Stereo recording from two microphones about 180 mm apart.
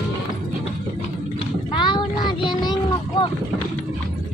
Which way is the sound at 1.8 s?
25° left (ahead or behind).